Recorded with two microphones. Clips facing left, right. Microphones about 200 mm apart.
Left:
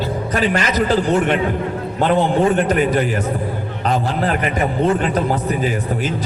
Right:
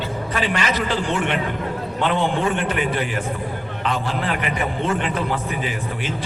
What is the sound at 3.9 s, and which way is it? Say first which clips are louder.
A man's voice: left 6 dB; 40° left (ahead or behind).